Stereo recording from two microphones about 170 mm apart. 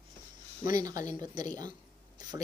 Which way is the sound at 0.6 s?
20° right (ahead or behind).